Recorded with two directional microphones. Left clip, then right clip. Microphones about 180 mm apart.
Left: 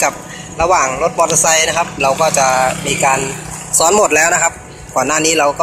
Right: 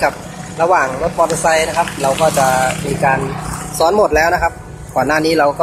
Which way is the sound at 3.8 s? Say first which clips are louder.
Left 1 dB; 10° left (ahead or behind).